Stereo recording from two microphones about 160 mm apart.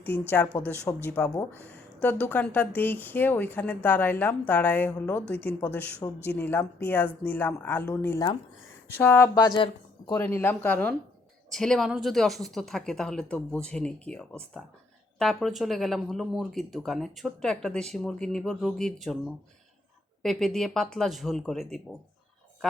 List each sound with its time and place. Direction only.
0.0 s speech: 10° left (ahead or behind)
9.3 s a woman's voice: 30° left (ahead or behind)
10.1 s speech: 15° left (ahead or behind)